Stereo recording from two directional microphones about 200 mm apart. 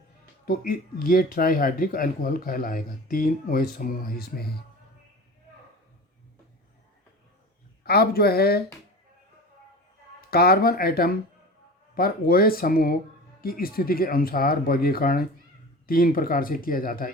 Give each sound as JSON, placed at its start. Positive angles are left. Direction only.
{"t": 0.4, "sound": "speech", "side_deg": 45}
{"t": 7.9, "sound": "speech", "side_deg": 50}
{"t": 10.2, "sound": "speech", "side_deg": 50}